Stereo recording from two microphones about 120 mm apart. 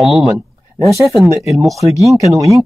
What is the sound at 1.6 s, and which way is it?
Speech, centre (ahead or behind).